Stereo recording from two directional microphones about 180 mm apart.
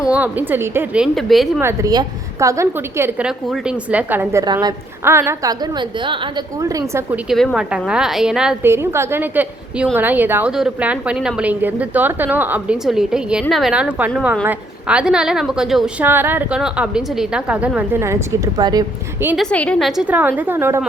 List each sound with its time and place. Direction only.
0.1 s a woman's voice: 10° right (ahead or behind)
1.6 s a woman's voice: 20° right (ahead or behind)
7.3 s a woman's voice: centre (ahead or behind); by 18.9 s 20° right (ahead or behind)
19.4 s a woman's voice: 5° left (ahead or behind); by 20.8 s 15° right (ahead or behind)